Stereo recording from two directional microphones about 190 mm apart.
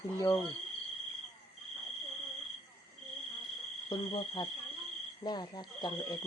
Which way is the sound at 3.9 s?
20° left (ahead or behind).